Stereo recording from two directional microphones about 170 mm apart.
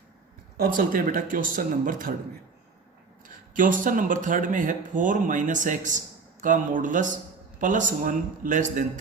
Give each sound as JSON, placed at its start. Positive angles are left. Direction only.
{"t": 0.5, "sound": "speech", "side_deg": -60}
{"t": 3.2, "sound": "speech", "side_deg": -50}